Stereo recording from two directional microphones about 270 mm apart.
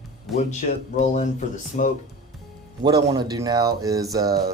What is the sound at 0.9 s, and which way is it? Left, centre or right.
Speech, left.